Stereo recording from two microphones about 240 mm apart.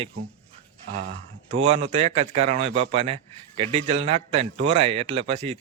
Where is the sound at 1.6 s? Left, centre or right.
Right.